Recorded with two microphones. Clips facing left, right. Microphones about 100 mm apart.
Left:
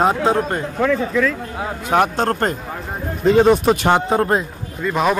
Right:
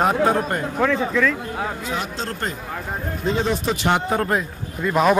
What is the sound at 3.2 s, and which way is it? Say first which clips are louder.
Speech: left 10 dB; 65° left (ahead or behind).